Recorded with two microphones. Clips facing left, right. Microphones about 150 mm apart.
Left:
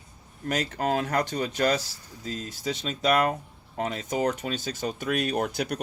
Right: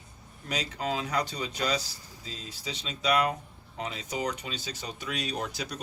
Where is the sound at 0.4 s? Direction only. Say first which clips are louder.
Left 5 dB; 50° left (ahead or behind).